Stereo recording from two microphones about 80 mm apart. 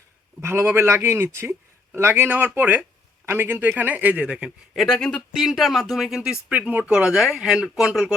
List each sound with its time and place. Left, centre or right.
0.4 s a man's voice: right; by 4.5 s centre
4.7 s speech: centre
5.3 s speech: centre